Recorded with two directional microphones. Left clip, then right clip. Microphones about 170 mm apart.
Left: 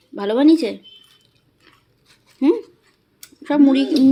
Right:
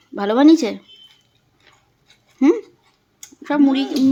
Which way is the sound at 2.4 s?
25° right (ahead or behind).